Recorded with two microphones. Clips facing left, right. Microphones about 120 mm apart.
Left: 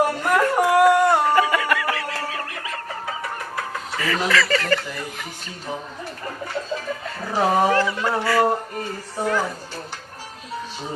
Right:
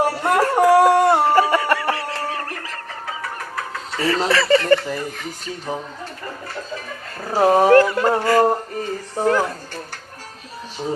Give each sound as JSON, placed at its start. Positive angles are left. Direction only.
{"t": 0.0, "sound": "a sound", "side_deg": -30}
{"t": 4.0, "sound": "speech", "side_deg": -30}
{"t": 7.3, "sound": "speech", "side_deg": -25}
{"t": 7.7, "sound": "speech", "side_deg": -50}